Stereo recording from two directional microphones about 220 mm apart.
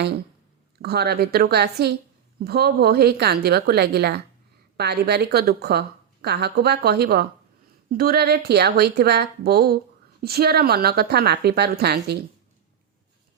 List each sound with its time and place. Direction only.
0.8 s a woman's voice: 45° right (ahead or behind)